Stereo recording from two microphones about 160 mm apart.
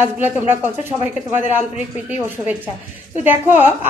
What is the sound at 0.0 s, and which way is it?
Speech, 15° right (ahead or behind).